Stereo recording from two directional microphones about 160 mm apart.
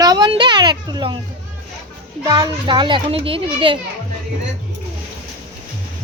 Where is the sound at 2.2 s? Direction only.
25° right (ahead or behind).